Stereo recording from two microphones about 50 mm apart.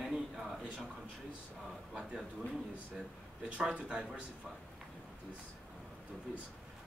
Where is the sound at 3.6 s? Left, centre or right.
Right.